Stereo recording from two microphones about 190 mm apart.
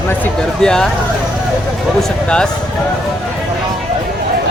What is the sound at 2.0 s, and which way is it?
Speech, 5° left (ahead or behind).